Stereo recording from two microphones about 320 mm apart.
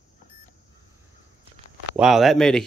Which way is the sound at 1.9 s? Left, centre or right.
Centre.